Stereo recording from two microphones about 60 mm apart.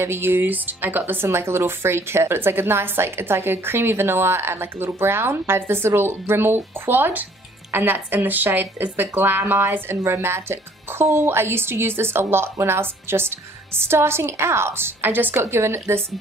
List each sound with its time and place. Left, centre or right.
0.0 s speech: right
10.0 s speech: right
15.4 s speech: right